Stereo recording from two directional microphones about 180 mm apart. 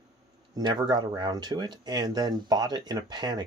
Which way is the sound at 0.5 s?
25° right (ahead or behind).